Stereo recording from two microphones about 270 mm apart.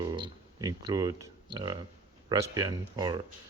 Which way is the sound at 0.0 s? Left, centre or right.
Centre.